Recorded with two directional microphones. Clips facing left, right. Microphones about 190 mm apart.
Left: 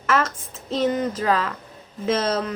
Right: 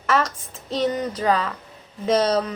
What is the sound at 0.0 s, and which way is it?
A woman's voice, centre (ahead or behind).